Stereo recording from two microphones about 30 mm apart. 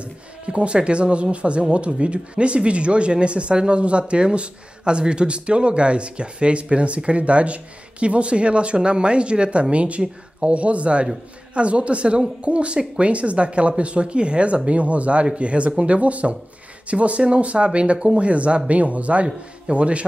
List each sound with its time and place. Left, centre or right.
0.0 s speech: right
19.2 s speech: right